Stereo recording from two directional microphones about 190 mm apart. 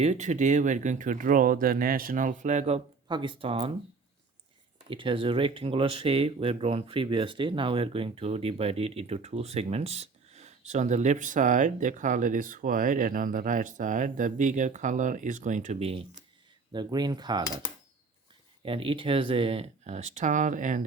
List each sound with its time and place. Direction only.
0.0 s speech: 40° right (ahead or behind)
4.9 s speech: 25° right (ahead or behind)
18.6 s speech: 30° right (ahead or behind)